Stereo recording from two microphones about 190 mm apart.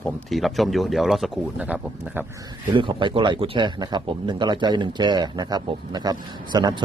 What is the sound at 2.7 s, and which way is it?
Speech, 25° right (ahead or behind).